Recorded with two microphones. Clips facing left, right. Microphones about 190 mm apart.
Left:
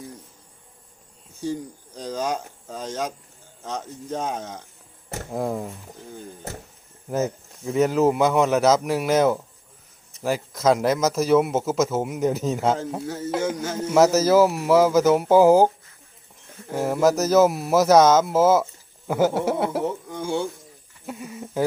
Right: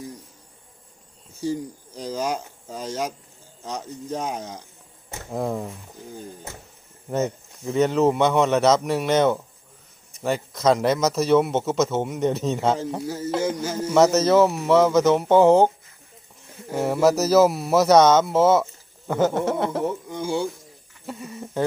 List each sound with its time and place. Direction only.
2.0 s speech: centre (ahead or behind)
7.1 s speech: 5° left (ahead or behind)